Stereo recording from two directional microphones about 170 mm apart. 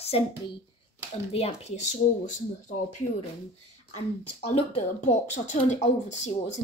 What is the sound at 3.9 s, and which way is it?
Speech, 40° left (ahead or behind).